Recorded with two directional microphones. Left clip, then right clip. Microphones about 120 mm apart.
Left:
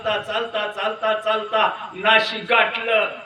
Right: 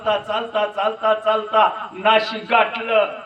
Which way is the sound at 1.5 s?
45° right (ahead or behind).